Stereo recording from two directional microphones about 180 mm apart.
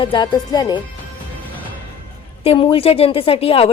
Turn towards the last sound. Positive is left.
turn(degrees=30)  # may be behind; listen again after turning